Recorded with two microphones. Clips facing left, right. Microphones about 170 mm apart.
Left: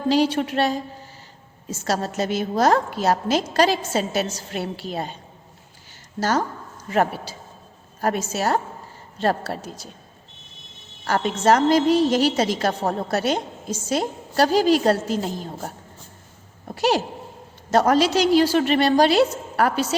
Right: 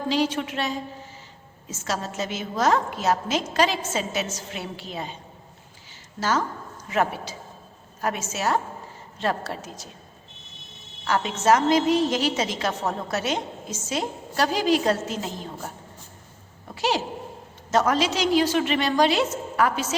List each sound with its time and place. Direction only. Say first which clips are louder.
0.1 s a woman's voice: left 5 dB; 35° left (ahead or behind)
6.1 s a woman's voice: left 3 dB; 40° left (ahead or behind)
11.0 s a woman's voice: left 3 dB; 40° left (ahead or behind)